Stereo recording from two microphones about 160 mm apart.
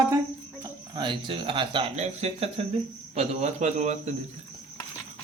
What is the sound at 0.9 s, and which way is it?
Speech, 30° right (ahead or behind).